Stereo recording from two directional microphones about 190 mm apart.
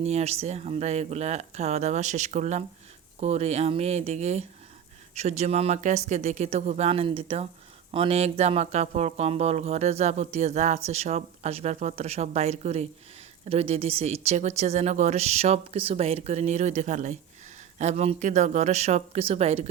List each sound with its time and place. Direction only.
0.0 s speech: 35° right (ahead or behind)